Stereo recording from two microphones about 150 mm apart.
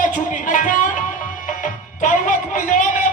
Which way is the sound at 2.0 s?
60° left (ahead or behind).